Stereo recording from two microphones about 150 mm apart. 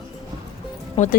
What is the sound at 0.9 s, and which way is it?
Speech, 55° left (ahead or behind).